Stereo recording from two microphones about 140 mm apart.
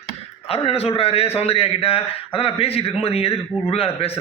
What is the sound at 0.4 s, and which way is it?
A man's voice, 45° left (ahead or behind).